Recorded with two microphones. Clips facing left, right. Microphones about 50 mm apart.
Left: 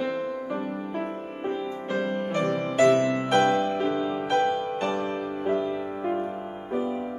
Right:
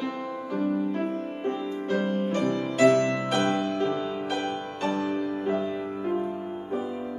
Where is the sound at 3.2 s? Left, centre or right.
Centre.